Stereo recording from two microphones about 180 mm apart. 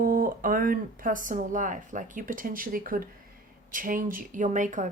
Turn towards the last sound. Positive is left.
turn(degrees=-45)  # may be behind; listen again after turning